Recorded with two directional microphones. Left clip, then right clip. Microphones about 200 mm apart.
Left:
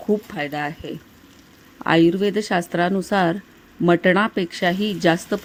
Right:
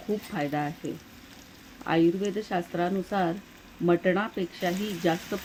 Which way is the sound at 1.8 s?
55° left (ahead or behind).